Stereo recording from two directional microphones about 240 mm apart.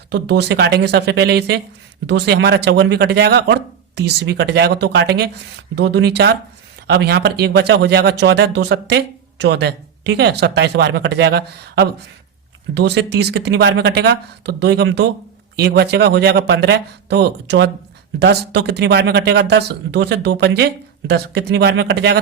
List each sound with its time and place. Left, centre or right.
0.1 s speech: right